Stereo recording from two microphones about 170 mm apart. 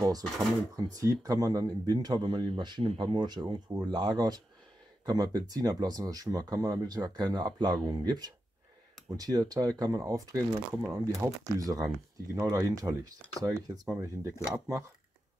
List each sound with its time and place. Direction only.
0.7 s speech: 20° right (ahead or behind)